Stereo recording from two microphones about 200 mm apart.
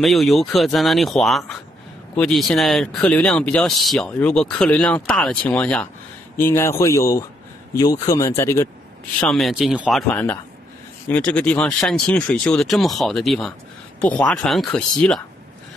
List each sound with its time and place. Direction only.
0.0 s speech: centre (ahead or behind)
9.2 s speech: centre (ahead or behind)